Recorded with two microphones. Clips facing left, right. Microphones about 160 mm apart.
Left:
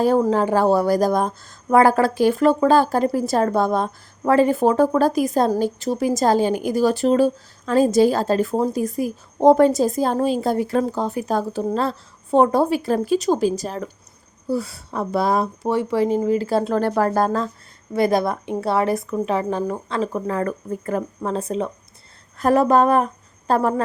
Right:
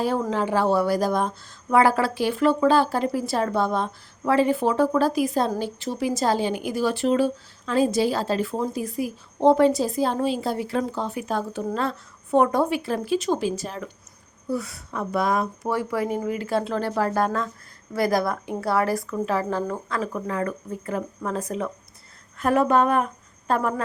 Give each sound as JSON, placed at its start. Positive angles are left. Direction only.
{"t": 0.0, "sound": "a woman's voice", "side_deg": 40}
{"t": 17.1, "sound": "a woman's voice", "side_deg": 35}
{"t": 17.9, "sound": "speech", "side_deg": 25}
{"t": 20.0, "sound": "a woman's voice", "side_deg": 35}
{"t": 21.2, "sound": "speech", "side_deg": 30}
{"t": 22.4, "sound": "a woman's voice", "side_deg": 35}